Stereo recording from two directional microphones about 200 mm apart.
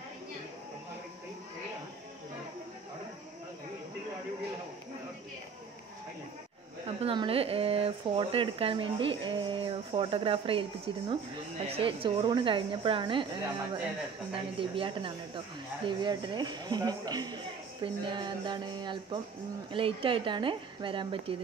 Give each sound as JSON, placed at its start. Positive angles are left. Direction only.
{"t": 7.0, "sound": "speech", "side_deg": -25}
{"t": 14.3, "sound": "speech", "side_deg": -25}